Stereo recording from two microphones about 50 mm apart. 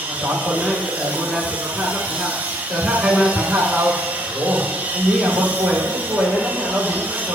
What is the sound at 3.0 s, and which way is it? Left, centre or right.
Speech, right.